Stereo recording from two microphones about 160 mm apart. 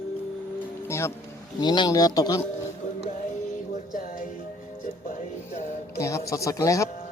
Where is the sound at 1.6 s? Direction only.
25° left (ahead or behind).